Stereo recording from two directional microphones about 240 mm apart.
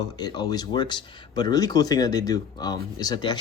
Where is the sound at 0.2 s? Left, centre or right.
Centre.